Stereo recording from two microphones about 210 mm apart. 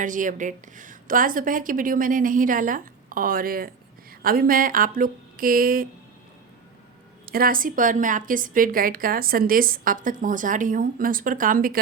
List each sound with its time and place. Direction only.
0.0 s a woman's voice: 40° right (ahead or behind)
7.3 s a woman's voice: 45° right (ahead or behind)